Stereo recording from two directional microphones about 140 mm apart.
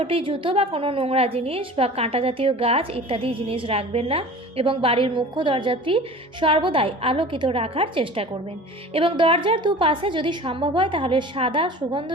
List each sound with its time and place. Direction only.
0.0 s a woman's voice: 40° right (ahead or behind)